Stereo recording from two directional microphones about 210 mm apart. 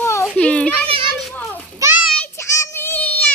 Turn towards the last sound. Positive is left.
turn(degrees=5)  # may be behind; listen again after turning